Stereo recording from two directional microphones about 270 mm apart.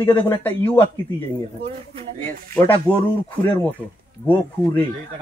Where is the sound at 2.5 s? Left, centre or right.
Centre.